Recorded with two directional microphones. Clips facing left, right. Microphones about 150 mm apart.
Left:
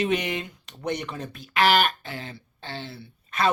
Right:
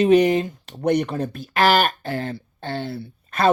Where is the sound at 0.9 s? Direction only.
55° right (ahead or behind).